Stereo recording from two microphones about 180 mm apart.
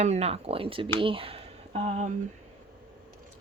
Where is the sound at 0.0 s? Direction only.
35° right (ahead or behind).